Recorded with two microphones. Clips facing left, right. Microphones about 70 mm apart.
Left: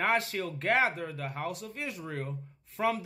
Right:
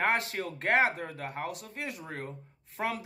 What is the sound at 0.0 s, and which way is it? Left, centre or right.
Speech, right.